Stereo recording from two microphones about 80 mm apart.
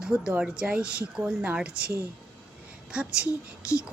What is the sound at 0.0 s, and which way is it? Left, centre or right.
A woman's voice, centre.